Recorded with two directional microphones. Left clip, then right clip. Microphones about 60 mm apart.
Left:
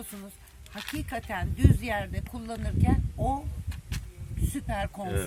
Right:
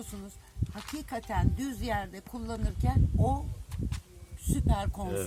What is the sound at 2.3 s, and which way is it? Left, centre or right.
Speech, right.